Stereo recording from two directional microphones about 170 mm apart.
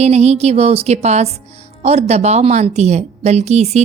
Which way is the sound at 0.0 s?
40° right (ahead or behind).